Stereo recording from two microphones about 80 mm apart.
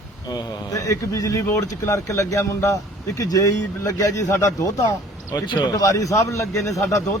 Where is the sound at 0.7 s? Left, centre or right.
Left.